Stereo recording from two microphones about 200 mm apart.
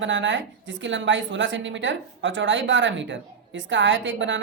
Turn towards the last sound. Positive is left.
turn(degrees=-70)  # may be behind; listen again after turning